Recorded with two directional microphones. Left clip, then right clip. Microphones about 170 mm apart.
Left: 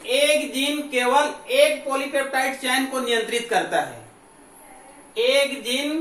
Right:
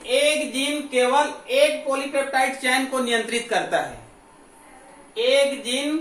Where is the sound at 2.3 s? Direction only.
20° right (ahead or behind).